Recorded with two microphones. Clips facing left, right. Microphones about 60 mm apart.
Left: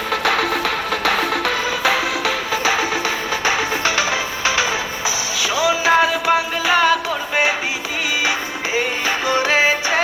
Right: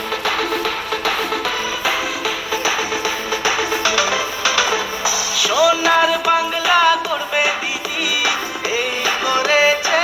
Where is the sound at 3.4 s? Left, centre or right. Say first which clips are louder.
Right 1 dB; left.